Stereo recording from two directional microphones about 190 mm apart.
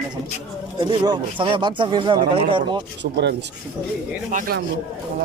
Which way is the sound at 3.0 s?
65° right (ahead or behind).